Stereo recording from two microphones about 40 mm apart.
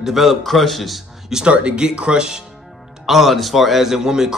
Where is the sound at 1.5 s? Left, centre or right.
Right.